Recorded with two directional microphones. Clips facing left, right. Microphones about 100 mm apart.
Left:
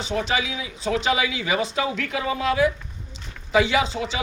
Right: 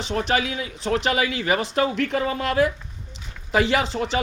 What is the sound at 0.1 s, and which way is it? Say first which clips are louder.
Speech: right 2 dB; 50° right (ahead or behind).